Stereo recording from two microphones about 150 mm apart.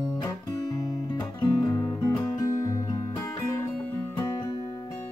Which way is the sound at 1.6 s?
20° left (ahead or behind).